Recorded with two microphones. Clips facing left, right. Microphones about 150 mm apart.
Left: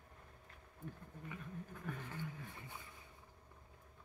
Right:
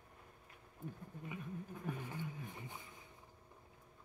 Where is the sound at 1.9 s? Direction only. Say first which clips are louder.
Right 2 dB; 15° right (ahead or behind).